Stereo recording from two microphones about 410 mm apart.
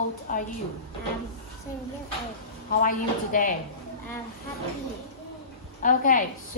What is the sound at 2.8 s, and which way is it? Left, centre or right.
Speech, centre.